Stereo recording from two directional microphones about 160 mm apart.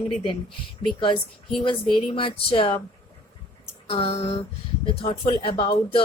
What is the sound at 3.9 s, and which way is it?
A woman's voice, 35° left (ahead or behind).